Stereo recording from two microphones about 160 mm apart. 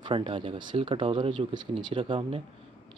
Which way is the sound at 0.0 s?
30° right (ahead or behind).